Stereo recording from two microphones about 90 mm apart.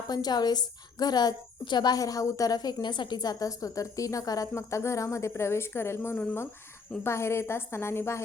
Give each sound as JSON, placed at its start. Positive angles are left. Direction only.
{"t": 0.1, "sound": "a woman's voice", "side_deg": 50}
{"t": 2.8, "sound": "a woman's voice", "side_deg": 60}